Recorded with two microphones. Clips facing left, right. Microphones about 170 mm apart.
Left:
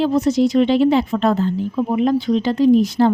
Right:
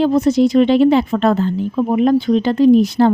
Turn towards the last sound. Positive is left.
turn(degrees=-65)  # may be behind; listen again after turning